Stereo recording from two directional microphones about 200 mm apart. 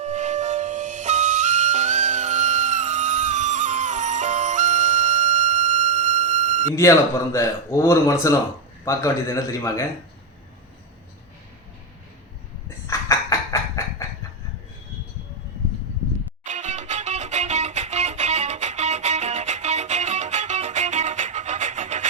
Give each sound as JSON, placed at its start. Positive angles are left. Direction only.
{"t": 0.0, "sound": "flute", "side_deg": -35}
{"t": 7.3, "sound": "speech", "side_deg": 15}
{"t": 12.9, "sound": "a sound", "side_deg": 15}
{"t": 16.4, "sound": "music", "side_deg": -35}